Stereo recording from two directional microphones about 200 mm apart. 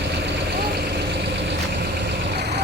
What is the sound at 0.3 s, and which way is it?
Vehicle, 55° right (ahead or behind).